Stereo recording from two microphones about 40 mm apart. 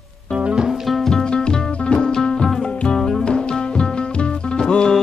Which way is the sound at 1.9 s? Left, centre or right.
Left.